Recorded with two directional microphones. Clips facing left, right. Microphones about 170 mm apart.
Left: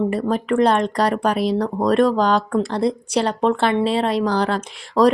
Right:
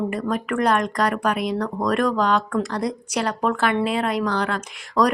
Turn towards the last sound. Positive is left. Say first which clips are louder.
# left 5 dB
turn(degrees=30)  # may be behind; listen again after turning